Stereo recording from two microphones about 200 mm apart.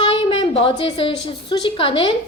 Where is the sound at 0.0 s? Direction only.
25° left (ahead or behind).